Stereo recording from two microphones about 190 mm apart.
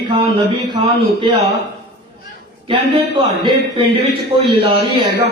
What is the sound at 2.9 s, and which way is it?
Speech, 25° right (ahead or behind).